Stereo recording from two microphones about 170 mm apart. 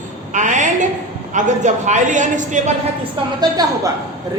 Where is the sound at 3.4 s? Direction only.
20° right (ahead or behind).